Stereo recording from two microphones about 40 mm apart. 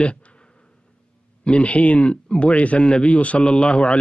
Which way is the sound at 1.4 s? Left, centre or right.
Left.